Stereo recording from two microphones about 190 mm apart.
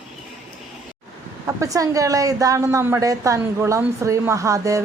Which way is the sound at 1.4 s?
15° right (ahead or behind).